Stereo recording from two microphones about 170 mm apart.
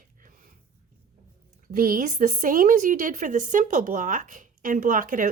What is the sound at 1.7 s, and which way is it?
A woman's voice, 55° right (ahead or behind).